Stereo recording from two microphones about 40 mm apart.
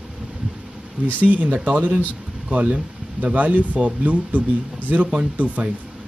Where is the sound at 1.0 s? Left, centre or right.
Right.